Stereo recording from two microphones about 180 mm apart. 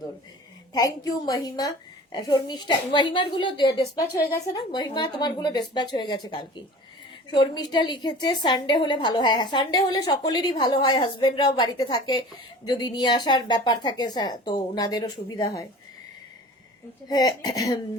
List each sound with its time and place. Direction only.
0.7 s a woman's voice: 20° left (ahead or behind)
17.1 s a woman's voice: 20° left (ahead or behind)